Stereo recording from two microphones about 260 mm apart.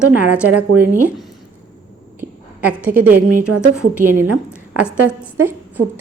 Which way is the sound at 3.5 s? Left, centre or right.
Right.